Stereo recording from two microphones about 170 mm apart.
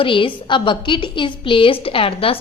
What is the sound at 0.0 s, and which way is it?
A woman's voice, 30° left (ahead or behind).